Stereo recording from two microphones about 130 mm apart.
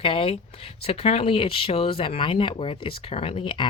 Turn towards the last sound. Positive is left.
turn(degrees=40)  # may be behind; listen again after turning